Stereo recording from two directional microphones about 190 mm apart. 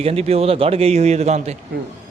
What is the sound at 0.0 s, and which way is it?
A man's voice, 30° right (ahead or behind).